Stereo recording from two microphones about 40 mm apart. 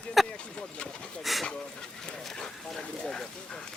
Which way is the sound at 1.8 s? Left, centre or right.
Centre.